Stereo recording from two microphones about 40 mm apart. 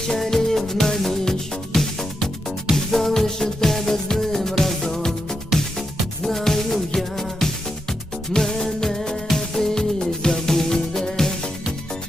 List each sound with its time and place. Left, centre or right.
0.1 s music: centre
6.2 s music: centre